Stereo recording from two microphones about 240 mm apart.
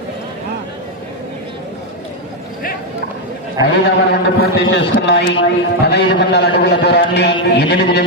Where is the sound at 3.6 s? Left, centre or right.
Left.